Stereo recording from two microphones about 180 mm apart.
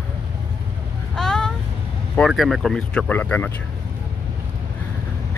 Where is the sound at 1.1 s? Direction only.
5° left (ahead or behind).